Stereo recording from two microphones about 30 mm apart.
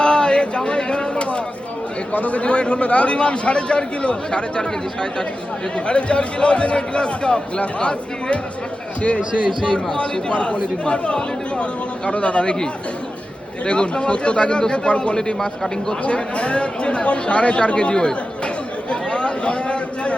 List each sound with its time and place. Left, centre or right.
0.0 s a sound: left
2.1 s a man's voice: left
5.7 s a man's voice: left
13.7 s a man's voice: left
15.1 s a man's voice: left
16.0 s a sound: left